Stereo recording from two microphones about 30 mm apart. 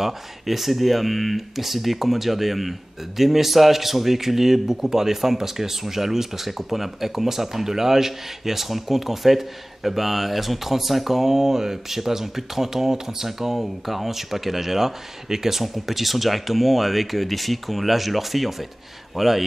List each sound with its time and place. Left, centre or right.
0.0 s a man's voice: centre